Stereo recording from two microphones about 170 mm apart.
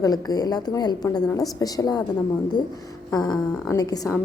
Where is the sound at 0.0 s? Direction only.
20° left (ahead or behind).